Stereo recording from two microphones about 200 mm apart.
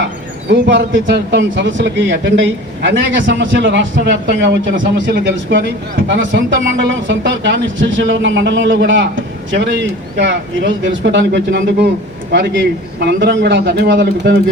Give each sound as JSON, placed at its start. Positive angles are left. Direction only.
{"t": 0.4, "sound": "a man's voice", "side_deg": -60}